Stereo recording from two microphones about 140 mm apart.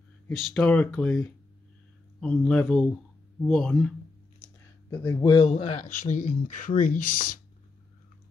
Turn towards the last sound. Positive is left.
turn(degrees=75)  # may be behind; listen again after turning